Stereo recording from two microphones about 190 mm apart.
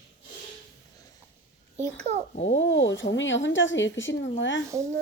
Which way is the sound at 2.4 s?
70° left (ahead or behind).